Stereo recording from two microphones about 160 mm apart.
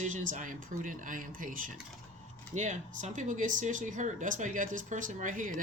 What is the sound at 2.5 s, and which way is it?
Speech, 45° right (ahead or behind).